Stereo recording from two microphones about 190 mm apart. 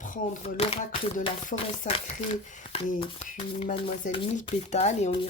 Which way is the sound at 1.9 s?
30° left (ahead or behind).